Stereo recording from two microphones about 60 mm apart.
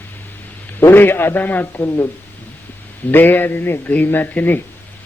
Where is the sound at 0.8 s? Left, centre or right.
Left.